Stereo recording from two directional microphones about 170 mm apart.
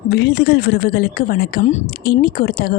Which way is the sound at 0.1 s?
75° left (ahead or behind).